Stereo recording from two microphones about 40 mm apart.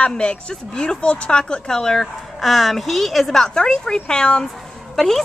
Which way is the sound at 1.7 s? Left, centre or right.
Centre.